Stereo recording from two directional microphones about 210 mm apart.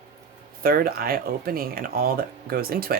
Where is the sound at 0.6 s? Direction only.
45° right (ahead or behind).